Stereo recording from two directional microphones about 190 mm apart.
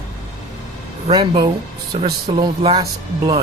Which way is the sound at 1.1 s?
20° right (ahead or behind).